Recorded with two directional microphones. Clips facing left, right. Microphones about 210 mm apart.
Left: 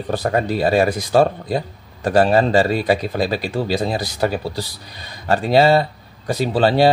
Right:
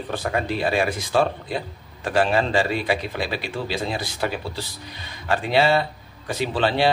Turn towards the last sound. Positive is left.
turn(degrees=40)  # may be behind; listen again after turning